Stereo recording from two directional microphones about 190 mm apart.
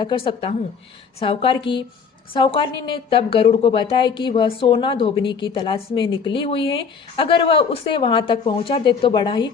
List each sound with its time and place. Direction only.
0.0 s a woman's voice: 25° left (ahead or behind)